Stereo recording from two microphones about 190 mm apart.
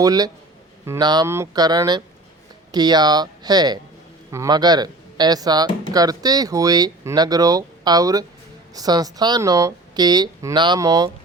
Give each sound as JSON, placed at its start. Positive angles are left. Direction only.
{"t": 0.0, "sound": "speech", "side_deg": -20}